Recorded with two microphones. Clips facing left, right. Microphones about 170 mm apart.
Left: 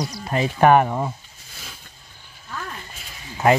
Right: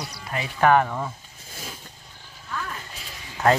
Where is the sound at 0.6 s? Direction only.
20° left (ahead or behind).